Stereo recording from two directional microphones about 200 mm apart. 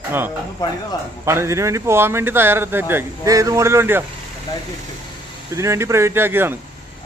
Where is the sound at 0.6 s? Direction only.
20° left (ahead or behind).